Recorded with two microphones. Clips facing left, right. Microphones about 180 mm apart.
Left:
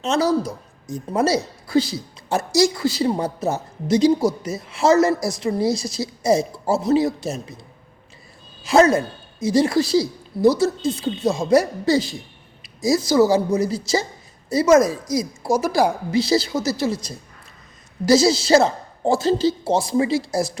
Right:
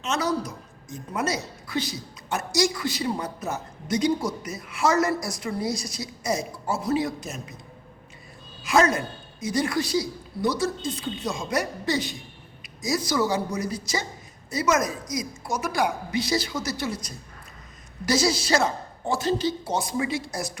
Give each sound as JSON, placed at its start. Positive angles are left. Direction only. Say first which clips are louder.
{"t": 0.0, "sound": "a woman's voice", "louder": "left 7 dB", "side_deg": 30}
{"t": 8.6, "sound": "a woman's voice", "louder": "left 6 dB", "side_deg": 30}